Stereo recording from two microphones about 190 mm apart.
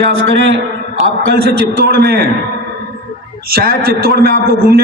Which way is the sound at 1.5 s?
55° right (ahead or behind).